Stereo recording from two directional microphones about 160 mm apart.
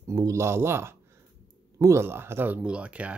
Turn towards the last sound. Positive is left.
turn(degrees=-10)  # may be behind; listen again after turning